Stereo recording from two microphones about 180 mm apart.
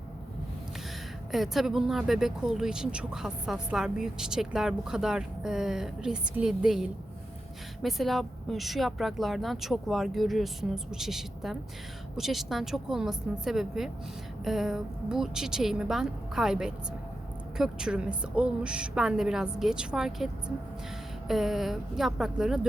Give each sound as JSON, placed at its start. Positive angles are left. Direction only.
{"t": 1.3, "sound": "speech", "side_deg": 0}